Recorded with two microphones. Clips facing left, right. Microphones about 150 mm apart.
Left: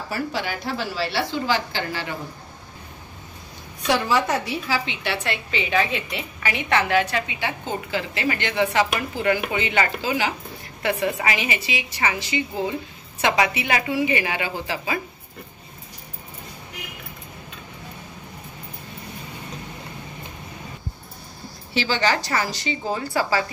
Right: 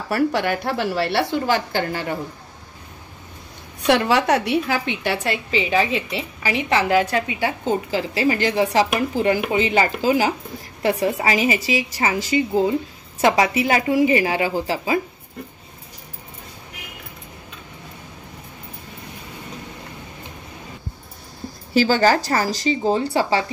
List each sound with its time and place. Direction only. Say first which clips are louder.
0.1 s a woman's voice: right 8 dB; 60° right (ahead or behind)
3.8 s a woman's voice: right 4 dB; 65° right (ahead or behind); by 15.0 s 35° right (ahead or behind)
21.7 s a woman's voice: right 6 dB; 40° right (ahead or behind)